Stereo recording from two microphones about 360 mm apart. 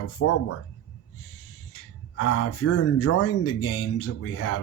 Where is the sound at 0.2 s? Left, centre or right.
Left.